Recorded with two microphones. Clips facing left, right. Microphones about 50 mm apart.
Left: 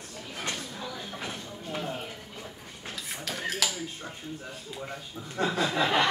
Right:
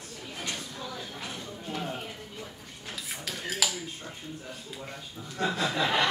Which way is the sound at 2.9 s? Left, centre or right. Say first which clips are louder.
Left 1 dB; centre.